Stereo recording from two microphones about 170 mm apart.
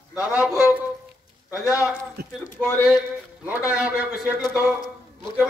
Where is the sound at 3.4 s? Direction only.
10° right (ahead or behind).